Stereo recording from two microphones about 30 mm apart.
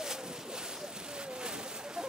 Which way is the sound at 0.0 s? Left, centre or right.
Right.